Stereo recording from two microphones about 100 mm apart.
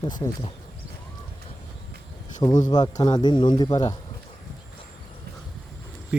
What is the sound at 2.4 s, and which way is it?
Speech, 45° left (ahead or behind).